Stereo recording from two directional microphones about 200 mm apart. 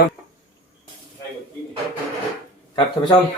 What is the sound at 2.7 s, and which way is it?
Speech, 20° left (ahead or behind).